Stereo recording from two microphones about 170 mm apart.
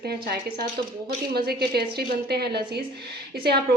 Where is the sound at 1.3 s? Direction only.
70° right (ahead or behind).